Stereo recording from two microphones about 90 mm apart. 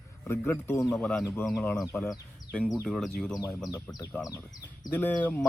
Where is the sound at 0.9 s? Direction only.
10° left (ahead or behind).